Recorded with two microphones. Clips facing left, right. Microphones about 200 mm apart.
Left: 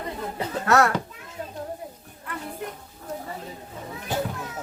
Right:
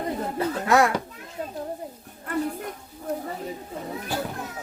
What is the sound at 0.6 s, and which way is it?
Speech, 15° right (ahead or behind).